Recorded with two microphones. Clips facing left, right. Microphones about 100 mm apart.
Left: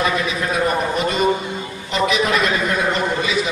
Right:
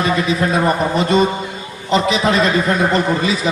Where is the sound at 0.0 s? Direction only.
35° right (ahead or behind).